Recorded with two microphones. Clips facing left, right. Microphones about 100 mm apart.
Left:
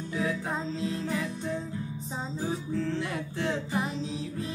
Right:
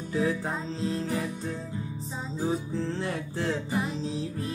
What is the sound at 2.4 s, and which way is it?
Music, 30° right (ahead or behind).